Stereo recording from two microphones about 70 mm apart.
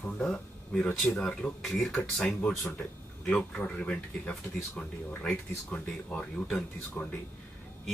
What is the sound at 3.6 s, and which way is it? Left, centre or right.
Speech, centre.